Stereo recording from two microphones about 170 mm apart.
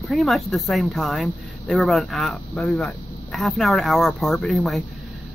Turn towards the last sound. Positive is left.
turn(degrees=0)  # may be behind; listen again after turning